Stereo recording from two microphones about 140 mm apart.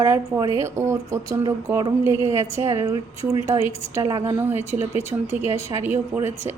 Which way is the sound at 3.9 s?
20° right (ahead or behind).